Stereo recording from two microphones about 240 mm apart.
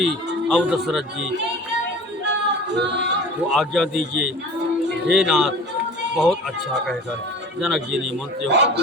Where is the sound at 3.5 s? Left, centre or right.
Centre.